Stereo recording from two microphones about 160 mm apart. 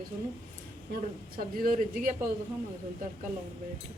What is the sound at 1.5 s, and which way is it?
Speech, 55° right (ahead or behind).